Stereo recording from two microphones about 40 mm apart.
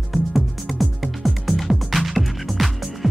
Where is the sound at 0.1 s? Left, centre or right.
Centre.